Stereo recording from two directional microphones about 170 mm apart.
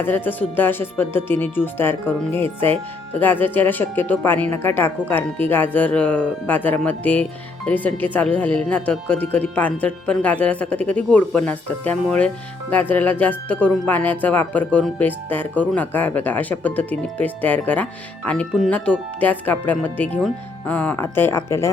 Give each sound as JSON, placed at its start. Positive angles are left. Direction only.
{"t": 0.0, "sound": "speech", "side_deg": 10}